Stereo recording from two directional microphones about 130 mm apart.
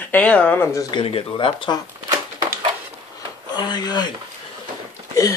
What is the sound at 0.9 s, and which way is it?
Speech, 45° left (ahead or behind).